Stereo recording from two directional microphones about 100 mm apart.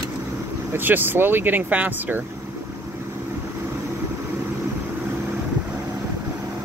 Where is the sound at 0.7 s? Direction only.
20° right (ahead or behind).